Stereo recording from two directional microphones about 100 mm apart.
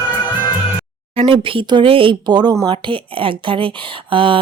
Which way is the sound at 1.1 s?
70° right (ahead or behind).